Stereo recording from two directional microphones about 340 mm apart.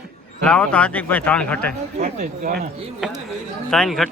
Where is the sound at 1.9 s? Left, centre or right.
Right.